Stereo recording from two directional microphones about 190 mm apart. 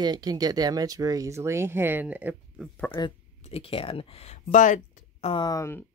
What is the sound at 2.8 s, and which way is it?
Speech, 25° left (ahead or behind).